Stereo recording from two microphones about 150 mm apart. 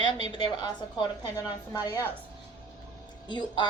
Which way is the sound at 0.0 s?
30° left (ahead or behind).